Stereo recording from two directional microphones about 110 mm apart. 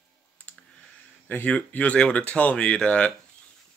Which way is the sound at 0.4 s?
15° left (ahead or behind).